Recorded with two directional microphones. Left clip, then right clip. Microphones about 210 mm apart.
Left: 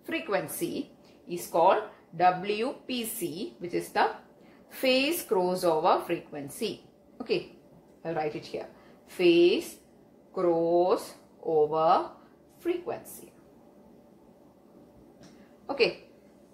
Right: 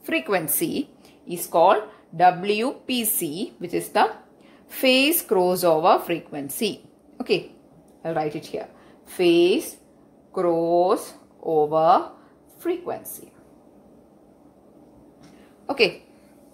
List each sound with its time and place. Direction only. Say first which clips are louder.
0.0 s a woman's voice: right 7 dB; 50° right (ahead or behind)
15.6 s a woman's voice: right 6 dB; 45° right (ahead or behind)